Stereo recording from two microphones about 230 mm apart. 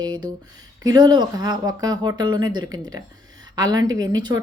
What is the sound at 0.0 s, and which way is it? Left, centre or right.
A woman's voice, centre.